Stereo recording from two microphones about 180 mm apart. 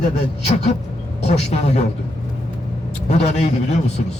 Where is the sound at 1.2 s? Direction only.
40° left (ahead or behind).